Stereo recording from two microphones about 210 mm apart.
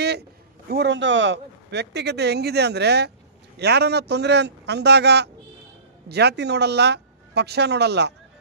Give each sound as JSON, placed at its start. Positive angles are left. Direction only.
{"t": 0.0, "sound": "a man's voice", "side_deg": -50}